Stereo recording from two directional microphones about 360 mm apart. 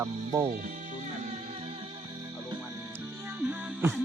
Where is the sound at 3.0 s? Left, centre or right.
Centre.